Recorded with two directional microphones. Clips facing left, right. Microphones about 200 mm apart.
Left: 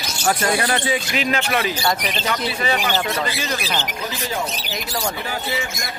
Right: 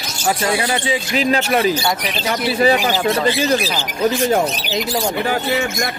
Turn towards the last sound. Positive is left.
turn(degrees=-65)  # may be behind; listen again after turning